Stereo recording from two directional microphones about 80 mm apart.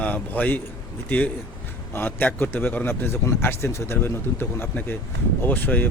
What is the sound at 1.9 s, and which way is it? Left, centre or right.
Speech, left.